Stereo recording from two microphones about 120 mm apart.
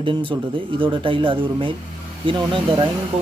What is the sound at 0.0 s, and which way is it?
A man's voice, 45° right (ahead or behind).